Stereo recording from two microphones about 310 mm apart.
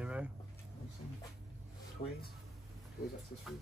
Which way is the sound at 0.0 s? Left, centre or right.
Centre.